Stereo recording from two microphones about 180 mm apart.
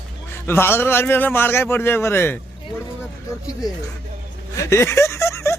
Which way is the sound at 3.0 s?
20° left (ahead or behind).